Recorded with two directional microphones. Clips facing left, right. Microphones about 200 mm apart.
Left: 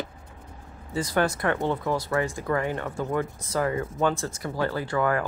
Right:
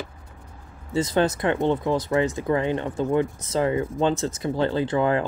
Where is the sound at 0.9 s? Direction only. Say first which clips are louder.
Right 3 dB; 25° right (ahead or behind).